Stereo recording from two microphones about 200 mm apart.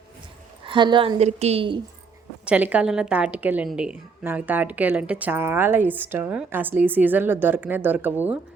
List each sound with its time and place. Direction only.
0.6 s a woman's voice: 25° right (ahead or behind)
2.4 s a woman's voice: 5° right (ahead or behind)